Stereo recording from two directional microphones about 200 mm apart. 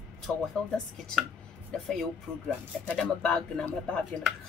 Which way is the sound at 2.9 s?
5° left (ahead or behind).